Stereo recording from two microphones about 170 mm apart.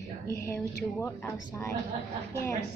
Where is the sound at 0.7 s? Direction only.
15° left (ahead or behind).